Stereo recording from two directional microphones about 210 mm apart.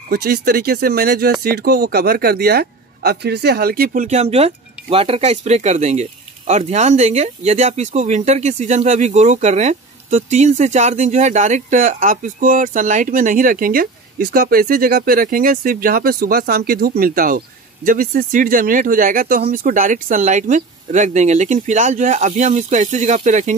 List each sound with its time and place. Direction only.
0.1 s speech: 50° right (ahead or behind)